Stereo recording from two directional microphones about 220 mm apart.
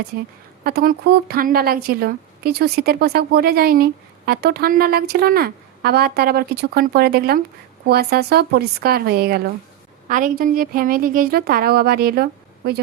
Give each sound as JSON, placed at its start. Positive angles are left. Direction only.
{"t": 0.6, "sound": "a woman's voice", "side_deg": -45}